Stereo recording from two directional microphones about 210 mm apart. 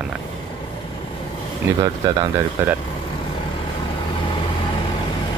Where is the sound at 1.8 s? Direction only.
15° right (ahead or behind).